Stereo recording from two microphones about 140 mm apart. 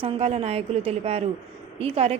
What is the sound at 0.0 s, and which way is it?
A woman's voice, 45° right (ahead or behind).